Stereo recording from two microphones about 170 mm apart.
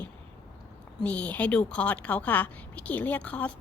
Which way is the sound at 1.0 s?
10° left (ahead or behind).